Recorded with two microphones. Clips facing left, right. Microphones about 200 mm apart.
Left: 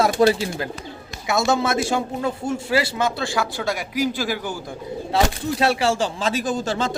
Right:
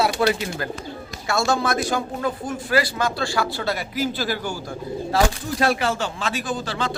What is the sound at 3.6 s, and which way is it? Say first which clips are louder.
A man's voice: left 1 dB; 15° left (ahead or behind).